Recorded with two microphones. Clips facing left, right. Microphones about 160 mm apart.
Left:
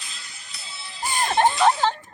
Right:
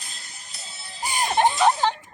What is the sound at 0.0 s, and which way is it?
Music, 45° right (ahead or behind).